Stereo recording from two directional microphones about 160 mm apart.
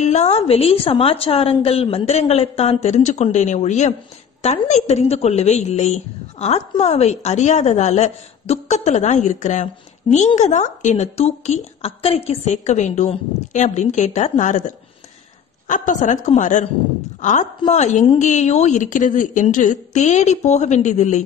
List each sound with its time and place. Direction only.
0.0 s a woman's voice: 45° left (ahead or behind)
15.7 s a woman's voice: 55° left (ahead or behind)